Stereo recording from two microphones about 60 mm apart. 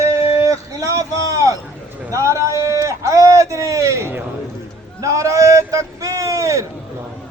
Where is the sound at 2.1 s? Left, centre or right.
Right.